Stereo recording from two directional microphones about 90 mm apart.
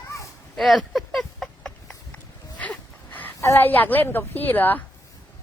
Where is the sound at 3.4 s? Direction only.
35° left (ahead or behind).